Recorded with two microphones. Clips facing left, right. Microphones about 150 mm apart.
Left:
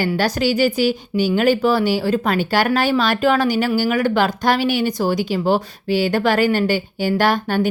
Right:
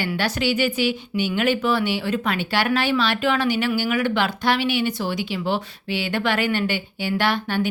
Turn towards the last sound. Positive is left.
turn(degrees=45)  # may be behind; listen again after turning